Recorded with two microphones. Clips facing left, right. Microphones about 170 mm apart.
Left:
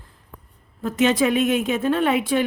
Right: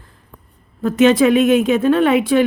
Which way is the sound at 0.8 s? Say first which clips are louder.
Right 7 dB; 90° right.